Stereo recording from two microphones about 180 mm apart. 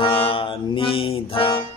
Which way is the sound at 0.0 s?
30° left (ahead or behind).